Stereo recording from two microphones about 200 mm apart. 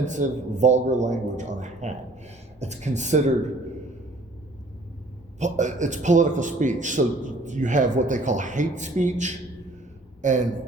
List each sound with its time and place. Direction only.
0.0 s a man's voice: 40° right (ahead or behind)
5.4 s a man's voice: 35° right (ahead or behind)